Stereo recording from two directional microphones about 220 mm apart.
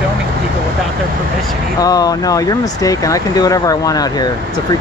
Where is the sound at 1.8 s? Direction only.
15° left (ahead or behind).